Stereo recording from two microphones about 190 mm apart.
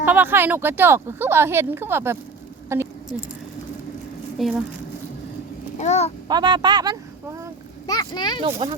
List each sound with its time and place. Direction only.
0.0 s speech: 10° right (ahead or behind)
2.7 s a sound: 15° right (ahead or behind)
4.4 s speech: centre (ahead or behind)
5.8 s a child's voice: 35° left (ahead or behind)
6.2 s speech: 25° right (ahead or behind)
7.9 s speech: 20° left (ahead or behind)
8.4 s speech: 30° right (ahead or behind)